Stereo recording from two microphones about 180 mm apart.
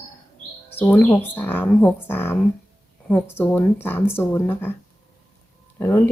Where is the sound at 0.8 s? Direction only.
10° left (ahead or behind).